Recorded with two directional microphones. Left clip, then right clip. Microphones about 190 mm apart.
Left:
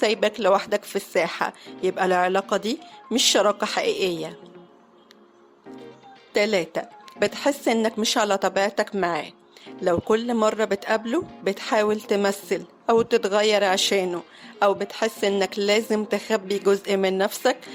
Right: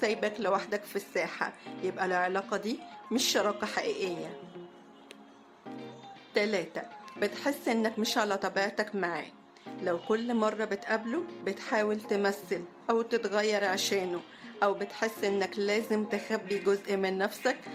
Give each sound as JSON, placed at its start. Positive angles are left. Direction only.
{"t": 0.0, "sound": "speech", "side_deg": 40}
{"t": 6.3, "sound": "speech", "side_deg": 40}